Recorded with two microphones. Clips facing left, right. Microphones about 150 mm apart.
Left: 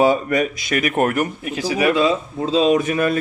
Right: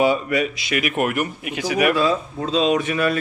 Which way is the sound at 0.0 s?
45° left (ahead or behind).